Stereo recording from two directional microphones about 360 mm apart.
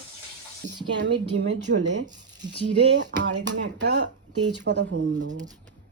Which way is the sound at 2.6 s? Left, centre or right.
Right.